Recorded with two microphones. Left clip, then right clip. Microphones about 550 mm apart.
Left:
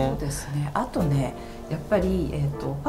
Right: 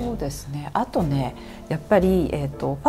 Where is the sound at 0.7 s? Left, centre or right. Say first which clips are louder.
Right 3 dB; right.